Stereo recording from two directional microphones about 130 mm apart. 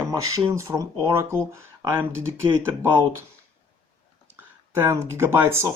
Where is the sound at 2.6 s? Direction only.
20° right (ahead or behind).